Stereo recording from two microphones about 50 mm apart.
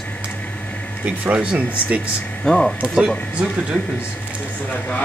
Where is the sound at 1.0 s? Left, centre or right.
Right.